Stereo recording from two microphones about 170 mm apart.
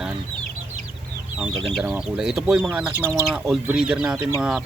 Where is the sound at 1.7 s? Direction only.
5° right (ahead or behind).